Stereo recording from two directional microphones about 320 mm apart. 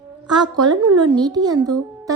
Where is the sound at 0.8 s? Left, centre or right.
Right.